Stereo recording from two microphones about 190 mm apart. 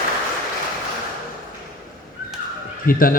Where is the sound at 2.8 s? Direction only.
50° left (ahead or behind).